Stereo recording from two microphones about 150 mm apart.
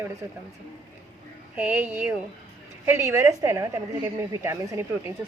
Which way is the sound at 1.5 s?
10° right (ahead or behind).